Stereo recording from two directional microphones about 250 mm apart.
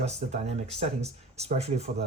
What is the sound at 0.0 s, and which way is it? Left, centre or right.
Speech, right.